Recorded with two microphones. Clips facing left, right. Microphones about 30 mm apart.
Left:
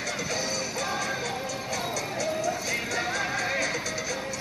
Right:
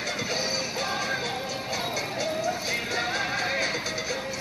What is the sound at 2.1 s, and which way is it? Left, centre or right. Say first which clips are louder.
Music: left 1 dB; right.